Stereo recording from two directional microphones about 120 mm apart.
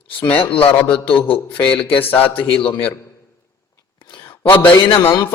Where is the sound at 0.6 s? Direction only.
15° left (ahead or behind).